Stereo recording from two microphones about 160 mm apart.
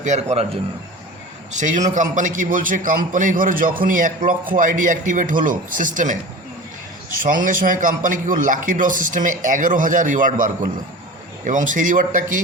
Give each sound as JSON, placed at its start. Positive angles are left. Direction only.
{"t": 0.0, "sound": "a man's voice", "side_deg": -45}
{"t": 1.5, "sound": "a man's voice", "side_deg": -50}